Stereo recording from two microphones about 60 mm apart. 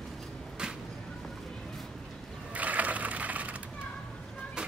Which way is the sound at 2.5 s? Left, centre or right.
Right.